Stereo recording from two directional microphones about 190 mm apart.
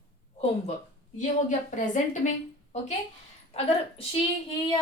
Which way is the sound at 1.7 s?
40° left (ahead or behind).